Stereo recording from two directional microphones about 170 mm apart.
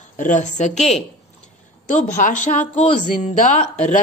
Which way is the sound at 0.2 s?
45° left (ahead or behind).